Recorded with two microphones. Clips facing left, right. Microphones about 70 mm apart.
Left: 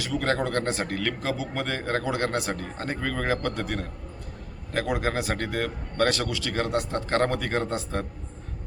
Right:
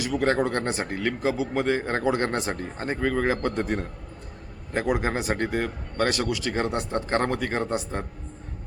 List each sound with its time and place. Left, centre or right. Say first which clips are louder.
0.0 s speech: right 3 dB; centre